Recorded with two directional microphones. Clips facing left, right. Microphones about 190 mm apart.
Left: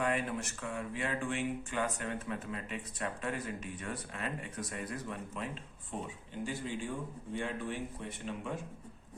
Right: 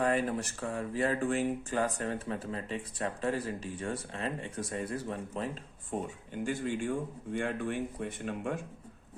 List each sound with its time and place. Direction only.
0.0 s speech: 35° right (ahead or behind)
5.9 s speech: 45° right (ahead or behind)